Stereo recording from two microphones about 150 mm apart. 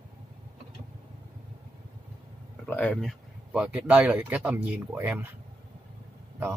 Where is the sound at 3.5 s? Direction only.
10° right (ahead or behind).